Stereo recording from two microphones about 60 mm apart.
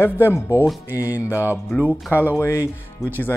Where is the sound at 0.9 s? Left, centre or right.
Left.